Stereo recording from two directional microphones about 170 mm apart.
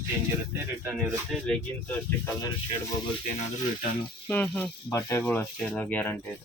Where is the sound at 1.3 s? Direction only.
5° left (ahead or behind).